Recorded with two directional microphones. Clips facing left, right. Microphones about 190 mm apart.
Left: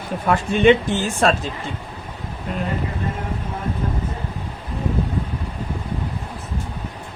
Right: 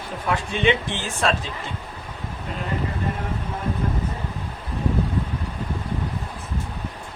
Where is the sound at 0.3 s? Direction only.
45° left (ahead or behind).